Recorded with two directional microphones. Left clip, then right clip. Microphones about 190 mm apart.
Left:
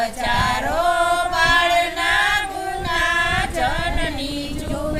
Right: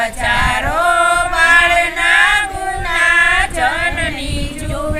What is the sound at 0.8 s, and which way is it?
Music, 15° left (ahead or behind).